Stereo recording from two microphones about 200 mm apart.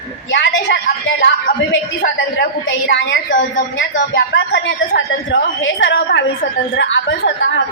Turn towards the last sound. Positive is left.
turn(degrees=65)  # may be behind; listen again after turning